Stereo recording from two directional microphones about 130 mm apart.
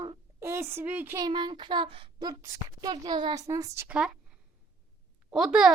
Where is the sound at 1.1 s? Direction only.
35° right (ahead or behind).